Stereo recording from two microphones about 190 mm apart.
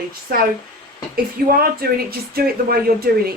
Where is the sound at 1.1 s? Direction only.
50° right (ahead or behind).